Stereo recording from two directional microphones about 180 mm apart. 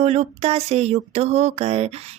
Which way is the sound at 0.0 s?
40° right (ahead or behind).